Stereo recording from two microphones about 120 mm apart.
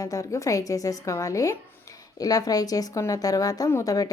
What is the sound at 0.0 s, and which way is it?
A woman's voice, 30° left (ahead or behind).